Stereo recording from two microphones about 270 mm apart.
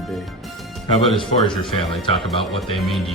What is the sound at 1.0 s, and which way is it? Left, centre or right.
Speech, centre.